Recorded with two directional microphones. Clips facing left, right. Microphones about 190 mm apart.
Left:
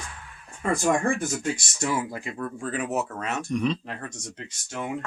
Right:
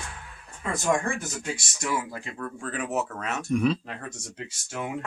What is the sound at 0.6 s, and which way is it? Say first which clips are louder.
Speech: left 6 dB; 50° left (ahead or behind).